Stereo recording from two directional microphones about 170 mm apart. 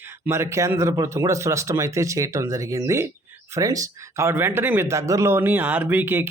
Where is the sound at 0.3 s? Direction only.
15° right (ahead or behind).